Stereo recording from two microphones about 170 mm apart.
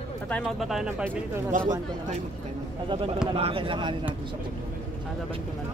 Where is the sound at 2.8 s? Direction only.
30° right (ahead or behind).